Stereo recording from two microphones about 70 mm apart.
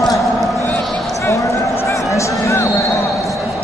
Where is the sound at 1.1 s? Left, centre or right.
Left.